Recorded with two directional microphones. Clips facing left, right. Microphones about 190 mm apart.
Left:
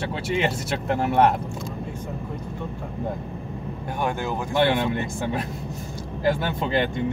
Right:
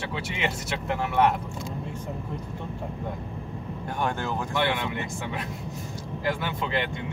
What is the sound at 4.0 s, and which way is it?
Speech, 10° left (ahead or behind).